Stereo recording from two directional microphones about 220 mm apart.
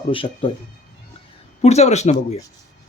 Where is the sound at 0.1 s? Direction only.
25° left (ahead or behind).